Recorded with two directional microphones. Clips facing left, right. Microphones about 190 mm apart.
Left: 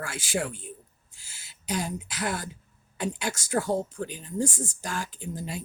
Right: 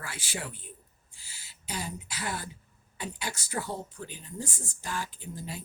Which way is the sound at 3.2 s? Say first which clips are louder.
Left 7 dB; 45° left (ahead or behind).